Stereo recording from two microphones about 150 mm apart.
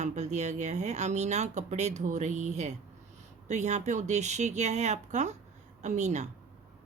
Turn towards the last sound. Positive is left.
turn(degrees=-50)  # may be behind; listen again after turning